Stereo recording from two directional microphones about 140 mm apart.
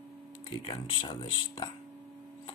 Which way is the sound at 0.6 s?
35° left (ahead or behind).